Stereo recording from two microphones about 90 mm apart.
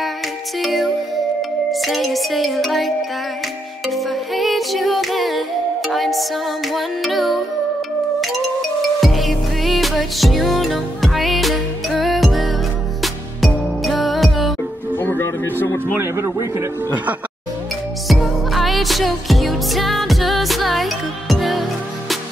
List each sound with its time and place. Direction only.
0.6 s music: centre (ahead or behind)
15.0 s music: 20° left (ahead or behind)
16.0 s a man's voice: 30° right (ahead or behind)
18.2 s music: centre (ahead or behind)